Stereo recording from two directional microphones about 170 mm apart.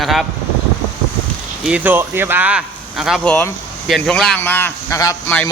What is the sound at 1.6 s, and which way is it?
Speech, 10° right (ahead or behind).